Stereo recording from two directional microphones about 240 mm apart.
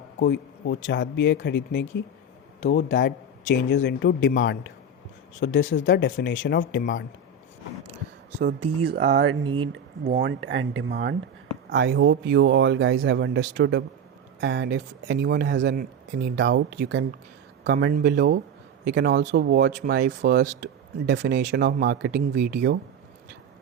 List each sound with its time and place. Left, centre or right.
0.2 s speech: left
8.9 s speech: right